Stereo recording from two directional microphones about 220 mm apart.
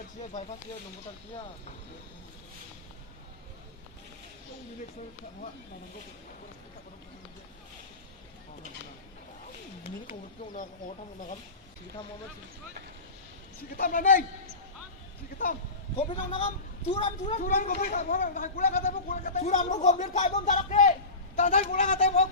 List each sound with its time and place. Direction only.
10.1 s a woman's voice: 35° left (ahead or behind)
13.7 s a woman's voice: 40° left (ahead or behind)
16.0 s a woman's voice: 25° left (ahead or behind)